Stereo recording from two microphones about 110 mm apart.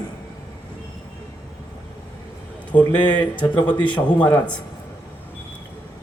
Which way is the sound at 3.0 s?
45° left (ahead or behind).